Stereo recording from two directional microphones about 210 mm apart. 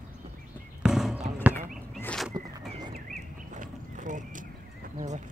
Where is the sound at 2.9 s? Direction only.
40° right (ahead or behind).